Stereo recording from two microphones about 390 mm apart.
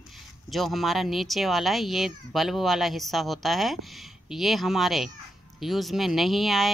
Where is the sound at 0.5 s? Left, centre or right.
Centre.